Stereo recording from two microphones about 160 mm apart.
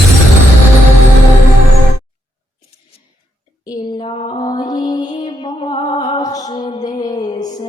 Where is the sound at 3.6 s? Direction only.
25° left (ahead or behind).